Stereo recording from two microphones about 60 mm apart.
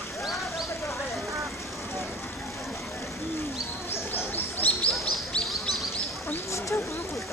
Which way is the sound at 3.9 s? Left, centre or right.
Left.